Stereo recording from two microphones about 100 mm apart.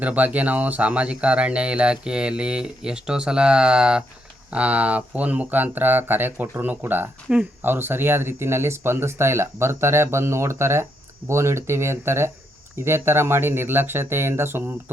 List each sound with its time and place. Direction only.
0.0 s speech: 15° right (ahead or behind)